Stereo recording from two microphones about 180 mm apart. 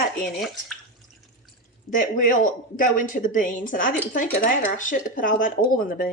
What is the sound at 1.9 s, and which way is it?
Speech, 45° left (ahead or behind).